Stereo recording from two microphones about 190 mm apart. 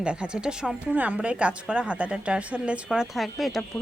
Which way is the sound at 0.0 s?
5° right (ahead or behind).